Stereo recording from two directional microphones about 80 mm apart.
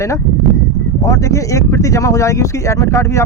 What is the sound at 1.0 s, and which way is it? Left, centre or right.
Speech, left.